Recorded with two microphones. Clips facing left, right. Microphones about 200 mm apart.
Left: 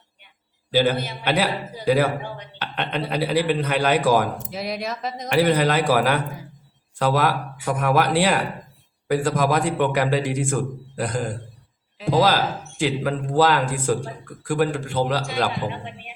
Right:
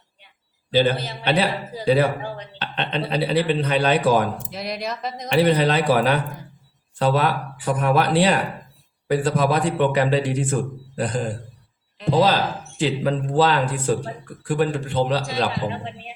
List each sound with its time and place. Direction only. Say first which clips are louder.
0.7 s a man's voice: right 1 dB; 10° left (ahead or behind)
15.6 s a man's voice: right 2 dB; 25° right (ahead or behind)